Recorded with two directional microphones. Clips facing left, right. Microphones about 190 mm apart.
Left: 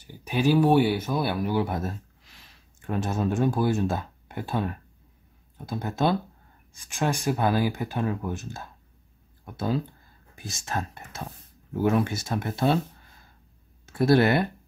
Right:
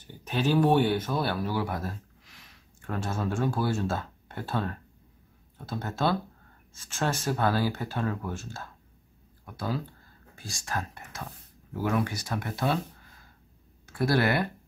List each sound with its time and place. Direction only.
0.0 s speech: 10° left (ahead or behind); by 12.7 s 25° left (ahead or behind)
13.8 s speech: 25° left (ahead or behind)